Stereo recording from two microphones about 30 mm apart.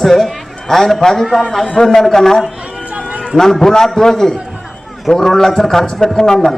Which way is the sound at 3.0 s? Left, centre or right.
Right.